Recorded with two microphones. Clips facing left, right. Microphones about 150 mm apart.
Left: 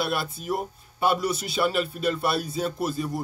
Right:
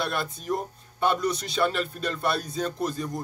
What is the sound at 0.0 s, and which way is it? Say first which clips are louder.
A man's voice: left 2 dB; 5° left (ahead or behind).